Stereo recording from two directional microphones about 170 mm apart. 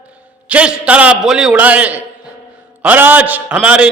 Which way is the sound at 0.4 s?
5° right (ahead or behind).